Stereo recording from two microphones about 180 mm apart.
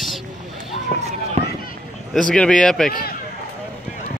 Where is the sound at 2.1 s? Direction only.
5° left (ahead or behind).